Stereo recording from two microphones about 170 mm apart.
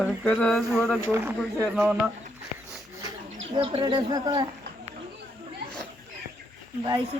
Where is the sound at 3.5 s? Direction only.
30° right (ahead or behind).